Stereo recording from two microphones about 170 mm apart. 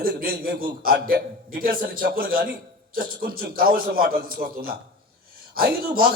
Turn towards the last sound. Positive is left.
turn(degrees=-60)  # may be behind; listen again after turning